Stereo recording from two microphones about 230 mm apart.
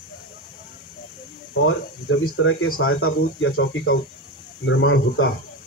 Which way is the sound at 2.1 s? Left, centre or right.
Left.